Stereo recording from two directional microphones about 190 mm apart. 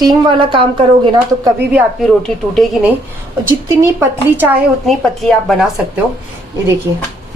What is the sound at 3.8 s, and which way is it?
Speech, 10° right (ahead or behind).